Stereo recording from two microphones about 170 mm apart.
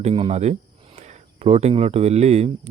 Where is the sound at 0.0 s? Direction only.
35° right (ahead or behind).